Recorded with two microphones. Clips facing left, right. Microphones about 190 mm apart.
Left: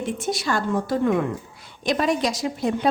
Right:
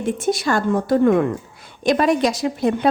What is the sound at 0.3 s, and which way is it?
A woman's voice, 50° right (ahead or behind).